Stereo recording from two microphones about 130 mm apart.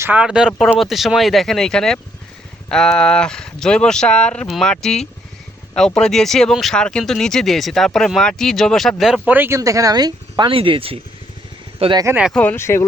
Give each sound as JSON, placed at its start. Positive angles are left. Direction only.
{"t": 0.0, "sound": "speech", "side_deg": -10}
{"t": 9.6, "sound": "speech", "side_deg": -25}
{"t": 12.3, "sound": "speech", "side_deg": 10}